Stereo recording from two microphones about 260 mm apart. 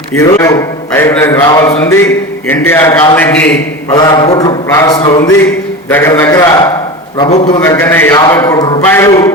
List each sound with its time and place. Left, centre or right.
0.1 s a man's voice: centre
7.2 s a man's voice: left
7.6 s a man's voice: centre